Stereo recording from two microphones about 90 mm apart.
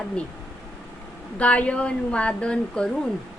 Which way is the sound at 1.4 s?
15° left (ahead or behind).